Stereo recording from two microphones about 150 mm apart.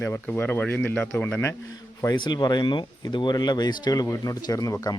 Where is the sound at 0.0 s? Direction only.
15° left (ahead or behind).